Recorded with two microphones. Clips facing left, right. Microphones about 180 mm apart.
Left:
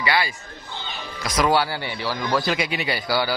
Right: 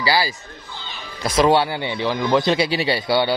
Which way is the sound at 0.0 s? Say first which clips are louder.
Right 3 dB; 30° right (ahead or behind).